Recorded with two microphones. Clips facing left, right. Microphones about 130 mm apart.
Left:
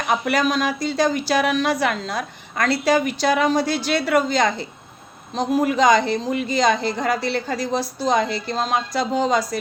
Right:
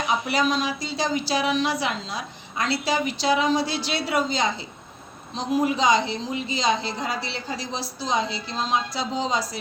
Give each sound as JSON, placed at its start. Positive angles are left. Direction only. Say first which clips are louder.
{"t": 0.1, "sound": "a woman's voice", "louder": "left 4 dB", "side_deg": 55}